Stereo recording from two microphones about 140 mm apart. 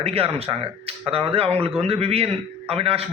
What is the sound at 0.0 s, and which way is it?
A man's voice, 45° right (ahead or behind).